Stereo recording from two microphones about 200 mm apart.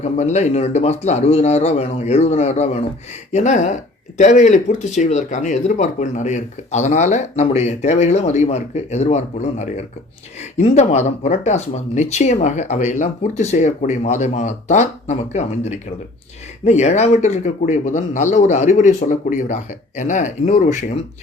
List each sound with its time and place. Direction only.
0.0 s speech: 35° left (ahead or behind)